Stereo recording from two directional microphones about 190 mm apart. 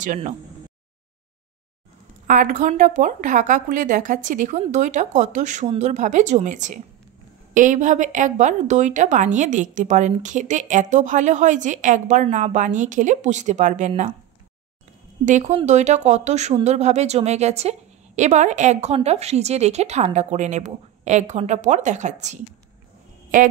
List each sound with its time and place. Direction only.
0.0 s a woman's voice: 40° right (ahead or behind)
2.2 s a woman's voice: 45° right (ahead or behind)
15.2 s a woman's voice: 40° right (ahead or behind)